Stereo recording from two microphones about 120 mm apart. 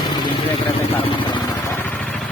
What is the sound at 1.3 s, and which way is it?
Vehicle, 30° left (ahead or behind).